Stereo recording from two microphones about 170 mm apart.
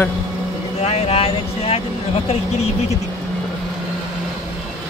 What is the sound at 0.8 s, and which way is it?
Speech, 40° left (ahead or behind).